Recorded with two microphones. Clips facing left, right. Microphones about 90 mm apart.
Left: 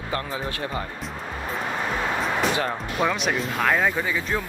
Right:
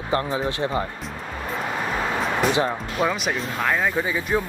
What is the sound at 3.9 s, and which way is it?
Speech, 15° right (ahead or behind).